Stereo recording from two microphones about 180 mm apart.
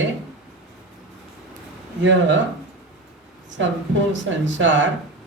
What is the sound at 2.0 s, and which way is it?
Speech, 90° right.